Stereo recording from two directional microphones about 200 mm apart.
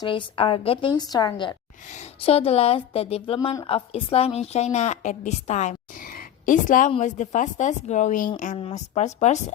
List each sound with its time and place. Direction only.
0.0 s a woman's voice: 25° left (ahead or behind)